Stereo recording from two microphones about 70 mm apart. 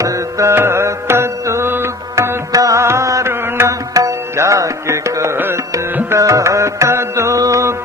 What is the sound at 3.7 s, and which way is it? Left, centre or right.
Music, right.